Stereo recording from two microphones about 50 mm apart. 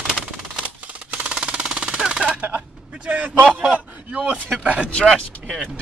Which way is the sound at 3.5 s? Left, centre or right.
Right.